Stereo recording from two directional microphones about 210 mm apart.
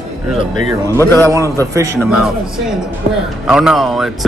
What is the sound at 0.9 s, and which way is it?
Speech, 10° left (ahead or behind).